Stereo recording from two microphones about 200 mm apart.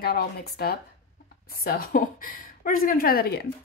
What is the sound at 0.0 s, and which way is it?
A woman's voice, 50° left (ahead or behind).